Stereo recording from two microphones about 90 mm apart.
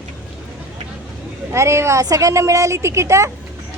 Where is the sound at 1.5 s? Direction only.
30° right (ahead or behind).